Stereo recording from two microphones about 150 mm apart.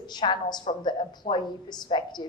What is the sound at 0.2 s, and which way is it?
A woman's voice, 30° left (ahead or behind).